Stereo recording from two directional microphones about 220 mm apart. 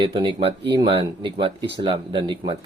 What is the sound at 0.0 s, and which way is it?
Speech, 20° right (ahead or behind).